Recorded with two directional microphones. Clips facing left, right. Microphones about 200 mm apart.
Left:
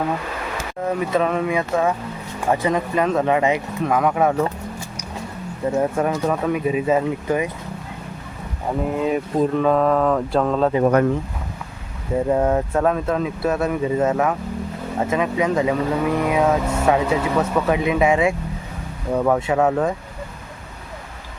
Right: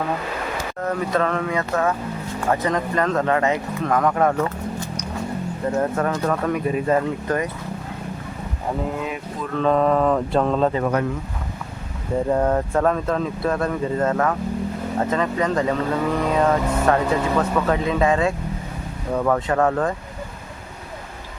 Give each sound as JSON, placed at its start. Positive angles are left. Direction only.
{"t": 0.8, "sound": "speech", "side_deg": 10}
{"t": 9.0, "sound": "speech", "side_deg": 40}
{"t": 9.5, "sound": "speech", "side_deg": 10}
{"t": 9.7, "sound": "mantra", "side_deg": 0}
{"t": 12.1, "sound": "speech", "side_deg": 5}